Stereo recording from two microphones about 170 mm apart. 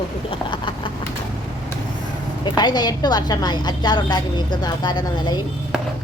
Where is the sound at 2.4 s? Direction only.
25° left (ahead or behind).